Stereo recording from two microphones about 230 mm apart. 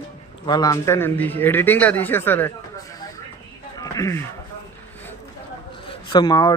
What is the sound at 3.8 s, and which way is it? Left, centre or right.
Speech, centre.